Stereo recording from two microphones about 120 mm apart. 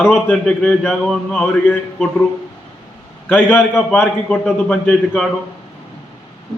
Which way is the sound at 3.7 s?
5° right (ahead or behind).